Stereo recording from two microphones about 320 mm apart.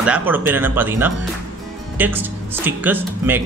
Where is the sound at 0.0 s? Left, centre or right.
Centre.